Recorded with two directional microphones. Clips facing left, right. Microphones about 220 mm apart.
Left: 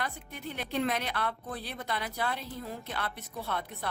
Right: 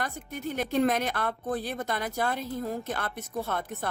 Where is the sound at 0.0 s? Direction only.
45° right (ahead or behind).